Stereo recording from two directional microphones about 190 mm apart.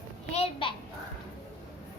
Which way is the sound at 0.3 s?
30° left (ahead or behind).